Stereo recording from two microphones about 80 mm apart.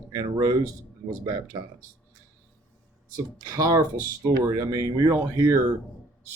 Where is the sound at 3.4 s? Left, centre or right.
Right.